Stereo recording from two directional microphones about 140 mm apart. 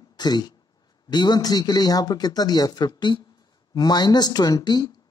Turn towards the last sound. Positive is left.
turn(degrees=30)  # may be behind; listen again after turning